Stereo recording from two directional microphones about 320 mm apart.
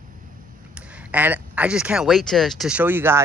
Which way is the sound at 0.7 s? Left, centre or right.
Centre.